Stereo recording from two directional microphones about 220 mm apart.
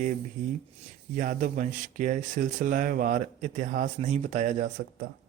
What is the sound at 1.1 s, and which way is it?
Speech, 40° right (ahead or behind).